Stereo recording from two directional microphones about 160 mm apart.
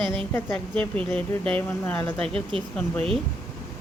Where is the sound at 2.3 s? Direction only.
35° right (ahead or behind).